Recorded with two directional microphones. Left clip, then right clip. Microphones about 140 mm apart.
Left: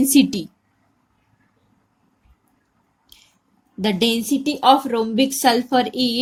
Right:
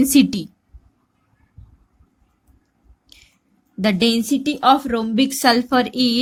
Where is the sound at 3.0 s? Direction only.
90° right.